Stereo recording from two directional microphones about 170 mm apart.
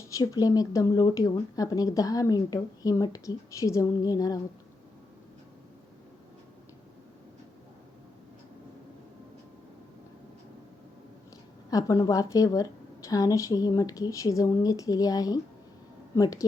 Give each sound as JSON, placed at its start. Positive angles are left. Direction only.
{"t": 0.1, "sound": "speech", "side_deg": 20}
{"t": 11.7, "sound": "speech", "side_deg": 20}